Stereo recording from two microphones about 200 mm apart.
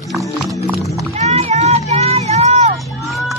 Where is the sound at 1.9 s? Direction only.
30° right (ahead or behind).